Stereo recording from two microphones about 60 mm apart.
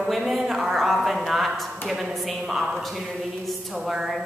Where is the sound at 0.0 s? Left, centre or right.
Centre.